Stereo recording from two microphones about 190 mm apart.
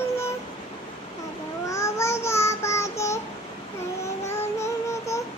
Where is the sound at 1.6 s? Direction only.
15° left (ahead or behind).